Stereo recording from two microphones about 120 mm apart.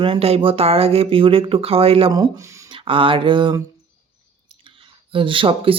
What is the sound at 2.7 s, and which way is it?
Speech, 45° right (ahead or behind).